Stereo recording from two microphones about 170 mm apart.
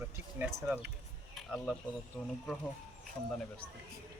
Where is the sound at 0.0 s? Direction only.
10° right (ahead or behind).